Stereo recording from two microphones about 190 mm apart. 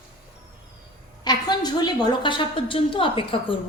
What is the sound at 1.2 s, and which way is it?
A woman's voice, 20° left (ahead or behind).